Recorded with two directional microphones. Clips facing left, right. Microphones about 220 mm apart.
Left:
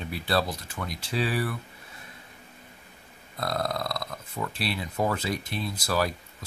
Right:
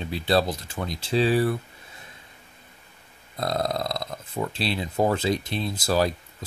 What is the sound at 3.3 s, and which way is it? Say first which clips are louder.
Speech: right 3 dB; 25° right (ahead or behind).